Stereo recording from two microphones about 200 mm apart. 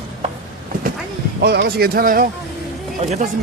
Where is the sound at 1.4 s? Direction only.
55° right (ahead or behind).